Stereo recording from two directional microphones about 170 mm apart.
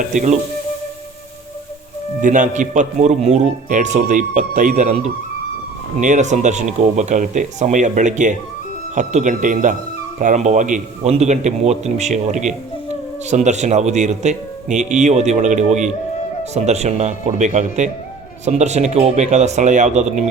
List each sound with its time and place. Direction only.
0.0 s a man's voice: 45° right (ahead or behind)
2.2 s a man's voice: 45° right (ahead or behind)